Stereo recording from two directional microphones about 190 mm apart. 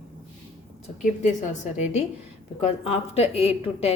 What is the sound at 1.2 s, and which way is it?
A woman's voice, 40° left (ahead or behind).